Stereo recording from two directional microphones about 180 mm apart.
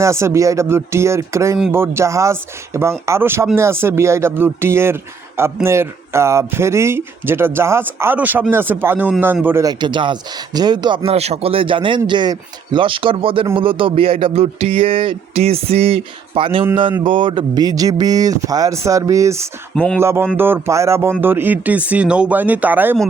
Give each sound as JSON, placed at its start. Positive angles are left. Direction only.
{"t": 0.0, "sound": "a man's voice", "side_deg": -15}
{"t": 19.7, "sound": "speech", "side_deg": 5}
{"t": 20.0, "sound": "speech", "side_deg": -15}